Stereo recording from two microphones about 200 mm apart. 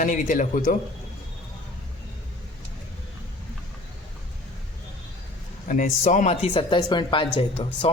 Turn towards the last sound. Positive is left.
turn(degrees=30)  # may be behind; listen again after turning